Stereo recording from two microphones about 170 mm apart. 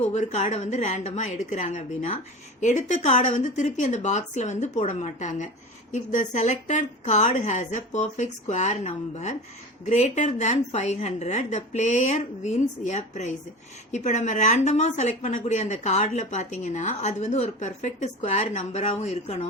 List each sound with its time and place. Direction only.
0.1 s a woman's voice: 45° left (ahead or behind)